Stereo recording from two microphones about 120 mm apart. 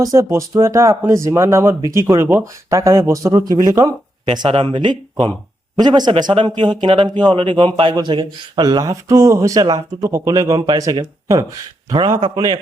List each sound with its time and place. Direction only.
0.0 s speech: 25° right (ahead or behind)
4.4 s speech: 45° right (ahead or behind); by 11.4 s 30° right (ahead or behind)
11.9 s a man's voice: 45° right (ahead or behind)